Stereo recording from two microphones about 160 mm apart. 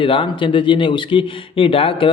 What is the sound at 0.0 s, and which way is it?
Speech, 35° left (ahead or behind).